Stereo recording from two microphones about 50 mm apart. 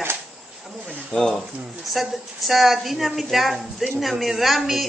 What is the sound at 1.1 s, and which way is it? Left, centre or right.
Speech, left.